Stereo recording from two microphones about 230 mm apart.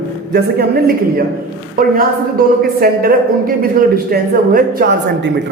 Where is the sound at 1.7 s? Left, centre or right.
Right.